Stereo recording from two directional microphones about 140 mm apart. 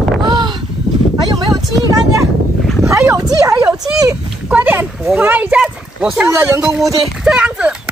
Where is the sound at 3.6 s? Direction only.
25° right (ahead or behind).